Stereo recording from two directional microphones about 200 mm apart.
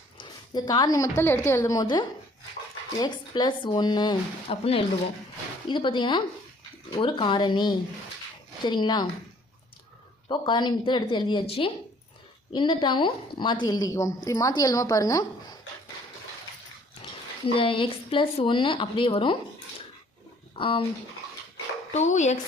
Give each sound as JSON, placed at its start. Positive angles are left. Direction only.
{"t": 0.2, "sound": "a sound", "side_deg": 25}
{"t": 1.2, "sound": "a woman's voice", "side_deg": 10}
{"t": 10.2, "sound": "a woman's voice", "side_deg": 25}
{"t": 17.0, "sound": "speech", "side_deg": 25}
{"t": 20.6, "sound": "a woman's voice", "side_deg": 25}
{"t": 21.9, "sound": "speech", "side_deg": 35}